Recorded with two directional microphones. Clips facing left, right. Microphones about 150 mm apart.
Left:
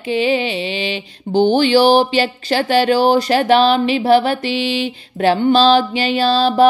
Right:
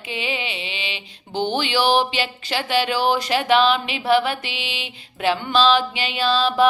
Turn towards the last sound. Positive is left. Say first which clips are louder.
# left 6 dB
turn(degrees=35)  # may be behind; listen again after turning